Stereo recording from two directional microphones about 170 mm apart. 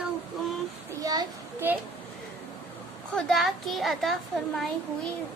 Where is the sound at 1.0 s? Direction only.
20° right (ahead or behind).